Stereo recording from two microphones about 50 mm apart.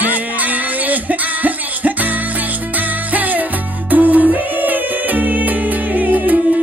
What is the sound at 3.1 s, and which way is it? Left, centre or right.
Music, right.